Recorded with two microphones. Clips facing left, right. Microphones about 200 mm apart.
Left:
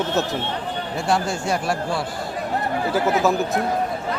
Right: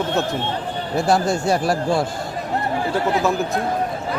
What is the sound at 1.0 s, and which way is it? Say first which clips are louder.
Speech: right 4 dB; 40° right (ahead or behind).